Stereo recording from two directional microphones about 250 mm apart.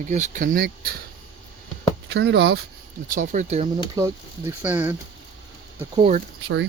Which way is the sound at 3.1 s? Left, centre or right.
Right.